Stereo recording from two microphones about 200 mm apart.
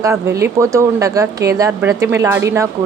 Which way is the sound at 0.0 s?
15° right (ahead or behind).